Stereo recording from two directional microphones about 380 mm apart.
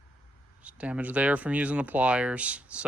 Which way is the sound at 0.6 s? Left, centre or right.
Centre.